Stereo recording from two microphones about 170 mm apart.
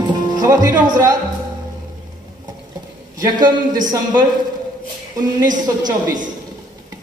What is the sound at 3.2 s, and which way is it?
Speech, 25° right (ahead or behind).